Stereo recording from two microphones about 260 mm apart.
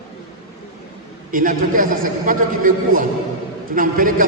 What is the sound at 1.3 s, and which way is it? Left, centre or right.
A man's voice, right.